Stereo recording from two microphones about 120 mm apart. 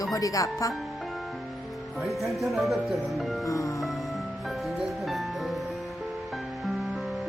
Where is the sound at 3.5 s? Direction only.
25° left (ahead or behind).